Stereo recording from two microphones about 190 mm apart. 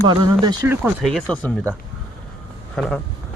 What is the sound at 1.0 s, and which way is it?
Speech, 5° left (ahead or behind).